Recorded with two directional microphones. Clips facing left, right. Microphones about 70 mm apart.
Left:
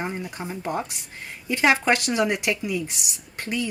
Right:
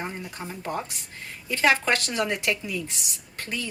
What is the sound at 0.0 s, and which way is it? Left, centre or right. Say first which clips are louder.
A woman's voice: left 4 dB; centre.